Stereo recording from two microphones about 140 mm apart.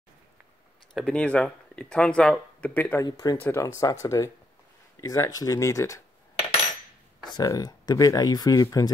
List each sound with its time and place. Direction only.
0.9 s speech: 5° left (ahead or behind)
3.0 s speech: 30° left (ahead or behind)
3.3 s speech: 15° left (ahead or behind)
3.6 s speech: 25° left (ahead or behind)
7.3 s speech: 25° left (ahead or behind)